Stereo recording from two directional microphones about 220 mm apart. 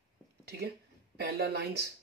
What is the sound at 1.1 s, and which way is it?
Speech, 45° right (ahead or behind).